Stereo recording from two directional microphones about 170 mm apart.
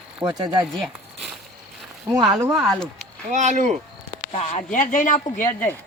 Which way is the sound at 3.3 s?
45° right (ahead or behind).